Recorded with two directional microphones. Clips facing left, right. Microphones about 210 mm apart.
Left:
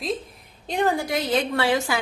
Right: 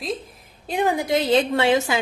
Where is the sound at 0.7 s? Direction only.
10° right (ahead or behind).